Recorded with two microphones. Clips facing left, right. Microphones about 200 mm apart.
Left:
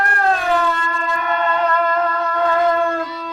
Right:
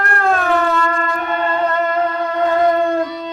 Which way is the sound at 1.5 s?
30° right (ahead or behind).